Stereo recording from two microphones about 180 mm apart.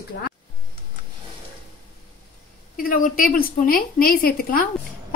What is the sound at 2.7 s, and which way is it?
A woman's voice, 50° left (ahead or behind).